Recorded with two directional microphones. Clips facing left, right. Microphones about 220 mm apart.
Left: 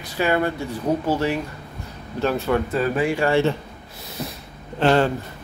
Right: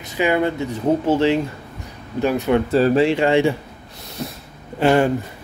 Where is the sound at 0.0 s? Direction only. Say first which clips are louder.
Right 2 dB; 20° right (ahead or behind).